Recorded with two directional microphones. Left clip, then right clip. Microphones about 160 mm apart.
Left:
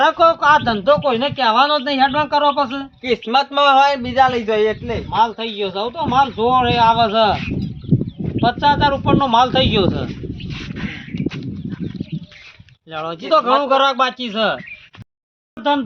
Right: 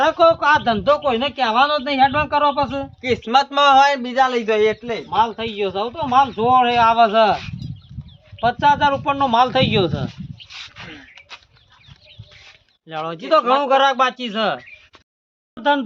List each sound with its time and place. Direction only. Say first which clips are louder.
0.0 s a man's voice: left 1 dB; 25° right (ahead or behind)
3.0 s a man's voice: even; 15° left (ahead or behind); by 5.0 s 35° left (ahead or behind)
5.1 s speech: left 2 dB; 15° right (ahead or behind)
8.4 s speech: left 1 dB; 5° right (ahead or behind)
12.9 s speech: left 1 dB; 20° right (ahead or behind)